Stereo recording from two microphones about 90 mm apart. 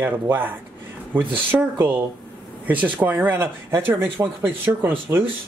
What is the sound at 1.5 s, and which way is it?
Speech, 15° right (ahead or behind).